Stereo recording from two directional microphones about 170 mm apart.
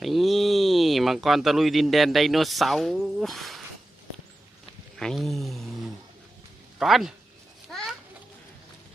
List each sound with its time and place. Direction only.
0.0 s speech: centre (ahead or behind)
4.9 s speech: centre (ahead or behind)
7.7 s a sound: 5° left (ahead or behind)